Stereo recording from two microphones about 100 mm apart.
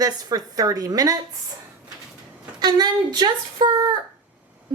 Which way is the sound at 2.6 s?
45° right (ahead or behind).